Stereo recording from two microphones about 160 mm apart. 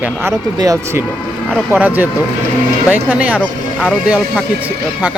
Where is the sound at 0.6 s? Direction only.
20° right (ahead or behind).